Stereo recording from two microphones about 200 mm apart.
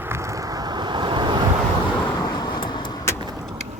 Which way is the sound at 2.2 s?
20° left (ahead or behind).